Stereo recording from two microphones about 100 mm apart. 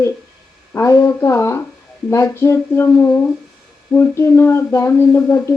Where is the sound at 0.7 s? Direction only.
30° left (ahead or behind).